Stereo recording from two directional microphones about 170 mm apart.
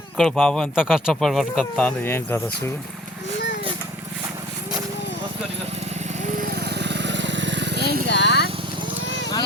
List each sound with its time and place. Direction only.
0.2 s speech: 5° left (ahead or behind)
6.3 s vehicle: 65° right (ahead or behind)
8.1 s vehicle: 90° left